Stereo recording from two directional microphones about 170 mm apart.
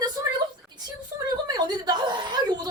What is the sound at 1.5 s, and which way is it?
A woman's voice, 25° right (ahead or behind).